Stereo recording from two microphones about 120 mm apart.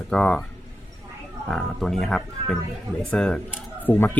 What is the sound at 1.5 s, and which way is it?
Speech, 5° left (ahead or behind).